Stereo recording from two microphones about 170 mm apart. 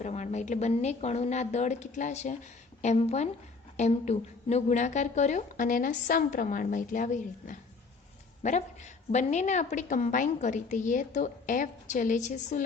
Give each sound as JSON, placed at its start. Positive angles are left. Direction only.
{"t": 0.0, "sound": "a woman's voice", "side_deg": 45}
{"t": 9.1, "sound": "a woman's voice", "side_deg": 45}